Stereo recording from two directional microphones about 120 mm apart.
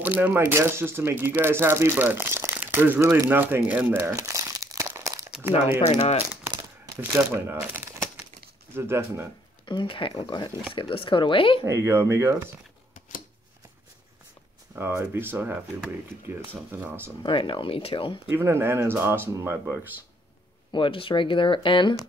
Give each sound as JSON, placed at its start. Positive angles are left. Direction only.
{"t": 0.0, "sound": "speech", "side_deg": -15}
{"t": 5.9, "sound": "speech", "side_deg": 60}
{"t": 7.1, "sound": "speech", "side_deg": -20}
{"t": 8.7, "sound": "speech", "side_deg": -20}
{"t": 9.7, "sound": "speech", "side_deg": 45}
{"t": 11.6, "sound": "speech", "side_deg": -25}
{"t": 14.8, "sound": "speech", "side_deg": -20}
{"t": 17.2, "sound": "speech", "side_deg": 45}
{"t": 18.3, "sound": "speech", "side_deg": -20}
{"t": 20.7, "sound": "speech", "side_deg": 45}